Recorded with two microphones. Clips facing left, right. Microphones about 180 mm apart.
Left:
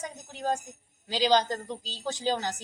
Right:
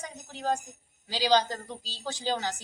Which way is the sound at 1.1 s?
20° left (ahead or behind).